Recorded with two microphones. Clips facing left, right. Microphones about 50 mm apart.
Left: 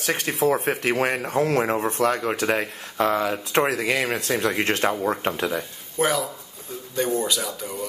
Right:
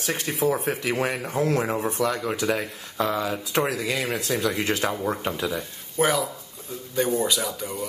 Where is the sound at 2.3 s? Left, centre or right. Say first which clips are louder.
Left 2 dB; left.